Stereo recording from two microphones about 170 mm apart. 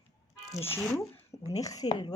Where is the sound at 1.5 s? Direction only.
20° left (ahead or behind).